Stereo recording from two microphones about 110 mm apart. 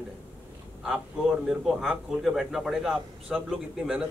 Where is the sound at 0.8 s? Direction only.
5° right (ahead or behind).